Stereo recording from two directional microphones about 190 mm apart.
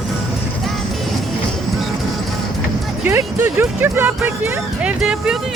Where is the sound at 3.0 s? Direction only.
10° right (ahead or behind).